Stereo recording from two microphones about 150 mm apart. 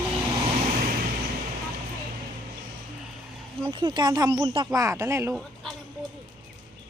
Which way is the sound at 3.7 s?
35° right (ahead or behind).